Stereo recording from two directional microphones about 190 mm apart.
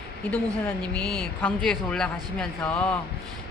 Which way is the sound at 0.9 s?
5° left (ahead or behind).